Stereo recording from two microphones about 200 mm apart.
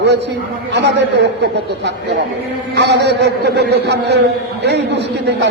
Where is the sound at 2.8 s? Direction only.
60° right (ahead or behind).